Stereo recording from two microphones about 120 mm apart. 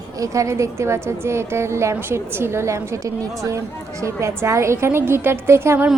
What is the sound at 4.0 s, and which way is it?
A woman's voice, 25° right (ahead or behind).